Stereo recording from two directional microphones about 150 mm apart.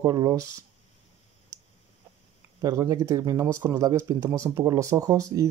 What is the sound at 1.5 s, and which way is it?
Clicking, 20° right (ahead or behind).